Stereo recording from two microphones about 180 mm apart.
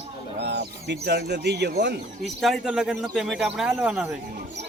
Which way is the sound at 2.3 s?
Centre (ahead or behind).